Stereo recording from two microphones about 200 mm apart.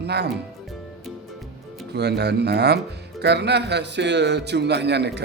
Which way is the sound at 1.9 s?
55° right (ahead or behind).